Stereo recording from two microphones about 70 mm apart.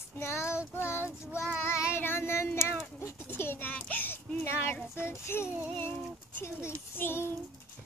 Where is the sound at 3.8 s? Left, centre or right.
Left.